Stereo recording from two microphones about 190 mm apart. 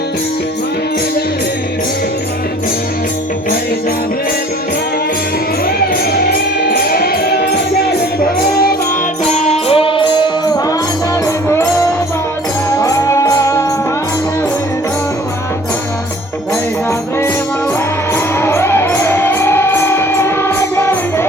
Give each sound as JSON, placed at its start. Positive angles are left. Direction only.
{"t": 5.6, "sound": "music", "side_deg": 55}
{"t": 9.2, "sound": "music", "side_deg": 35}
{"t": 12.7, "sound": "music", "side_deg": 15}
{"t": 18.1, "sound": "music", "side_deg": 15}